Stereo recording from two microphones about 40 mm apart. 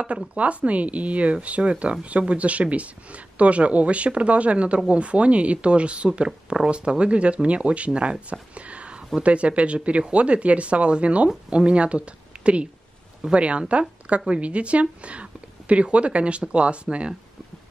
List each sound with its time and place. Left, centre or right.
0.3 s speech: right
13.3 s speech: right